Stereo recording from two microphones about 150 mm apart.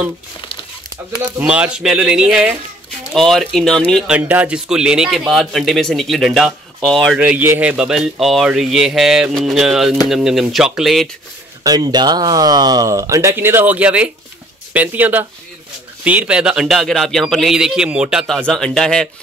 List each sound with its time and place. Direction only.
1.5 s speech: 5° right (ahead or behind)
4.1 s speech: 10° right (ahead or behind)
11.6 s speech: 25° right (ahead or behind); by 19.0 s 5° left (ahead or behind)